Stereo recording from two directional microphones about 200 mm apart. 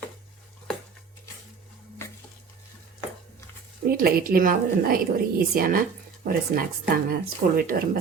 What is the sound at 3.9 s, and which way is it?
Speech, 50° right (ahead or behind).